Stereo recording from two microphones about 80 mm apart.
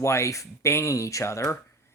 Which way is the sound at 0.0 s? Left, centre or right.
Left.